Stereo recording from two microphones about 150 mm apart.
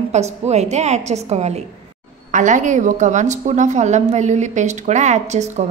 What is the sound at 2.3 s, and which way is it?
A woman's voice, 55° right (ahead or behind).